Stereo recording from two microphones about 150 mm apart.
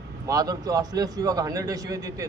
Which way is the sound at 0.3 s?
25° right (ahead or behind).